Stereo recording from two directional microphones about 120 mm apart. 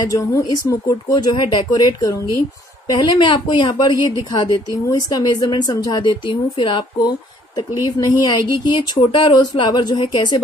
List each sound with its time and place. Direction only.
0.0 s a woman's voice: 30° left (ahead or behind)
1.3 s a woman's voice: 40° left (ahead or behind)